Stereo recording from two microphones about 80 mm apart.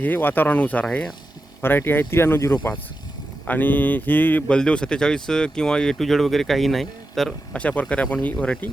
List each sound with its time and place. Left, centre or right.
0.0 s speech: left
4.4 s speech: centre
7.5 s speech: centre